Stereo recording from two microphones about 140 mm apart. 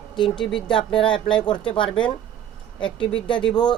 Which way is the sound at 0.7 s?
35° left (ahead or behind).